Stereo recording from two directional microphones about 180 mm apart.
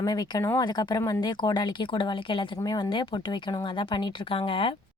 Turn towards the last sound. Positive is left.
turn(degrees=30)  # may be behind; listen again after turning